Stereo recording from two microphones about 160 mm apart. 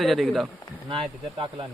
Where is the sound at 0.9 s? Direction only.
35° right (ahead or behind).